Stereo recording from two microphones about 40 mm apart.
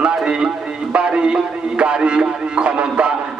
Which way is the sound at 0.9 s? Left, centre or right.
Right.